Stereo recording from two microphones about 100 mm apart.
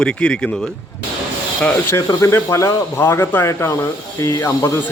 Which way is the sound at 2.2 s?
30° left (ahead or behind).